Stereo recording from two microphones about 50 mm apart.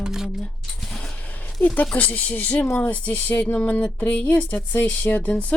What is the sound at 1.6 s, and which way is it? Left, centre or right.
Speech, left.